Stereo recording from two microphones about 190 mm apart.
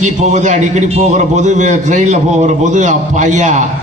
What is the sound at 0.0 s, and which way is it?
A man's voice, 40° right (ahead or behind).